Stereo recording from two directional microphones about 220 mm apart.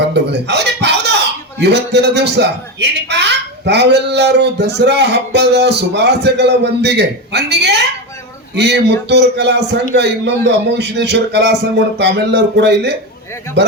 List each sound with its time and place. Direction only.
0.1 s speech: 50° right (ahead or behind)